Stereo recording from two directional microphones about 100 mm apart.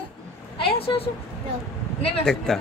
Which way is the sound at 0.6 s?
70° left (ahead or behind).